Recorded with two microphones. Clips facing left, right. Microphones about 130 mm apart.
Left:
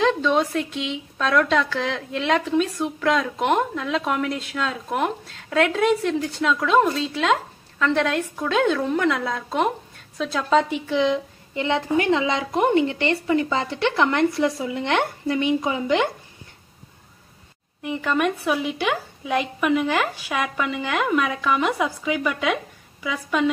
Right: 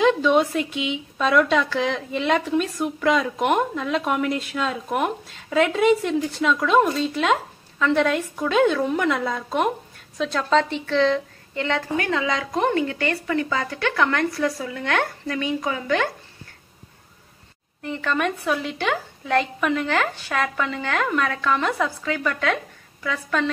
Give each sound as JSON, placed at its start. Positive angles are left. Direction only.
{"t": 0.0, "sound": "a woman's voice", "side_deg": -5}
{"t": 17.8, "sound": "a woman's voice", "side_deg": 10}